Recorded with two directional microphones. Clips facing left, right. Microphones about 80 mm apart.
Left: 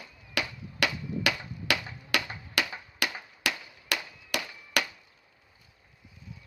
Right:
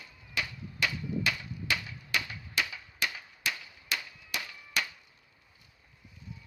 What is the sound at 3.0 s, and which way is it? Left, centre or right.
Whip, left.